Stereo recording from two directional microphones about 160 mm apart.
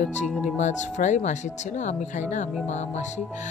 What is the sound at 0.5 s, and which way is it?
Speech, 45° left (ahead or behind).